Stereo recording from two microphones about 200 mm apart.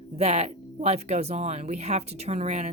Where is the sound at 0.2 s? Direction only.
30° right (ahead or behind).